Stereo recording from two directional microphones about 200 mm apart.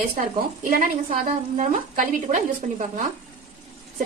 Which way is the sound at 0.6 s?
40° right (ahead or behind).